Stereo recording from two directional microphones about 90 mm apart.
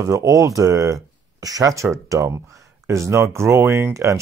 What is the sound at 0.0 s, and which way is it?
Speech, 35° right (ahead or behind).